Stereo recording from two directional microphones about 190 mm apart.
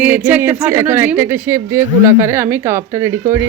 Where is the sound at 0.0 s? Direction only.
10° right (ahead or behind).